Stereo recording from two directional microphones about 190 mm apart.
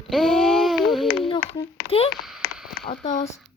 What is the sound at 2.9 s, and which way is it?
Speech, 35° left (ahead or behind).